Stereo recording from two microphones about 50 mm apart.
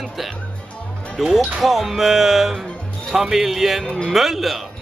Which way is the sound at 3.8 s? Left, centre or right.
Centre.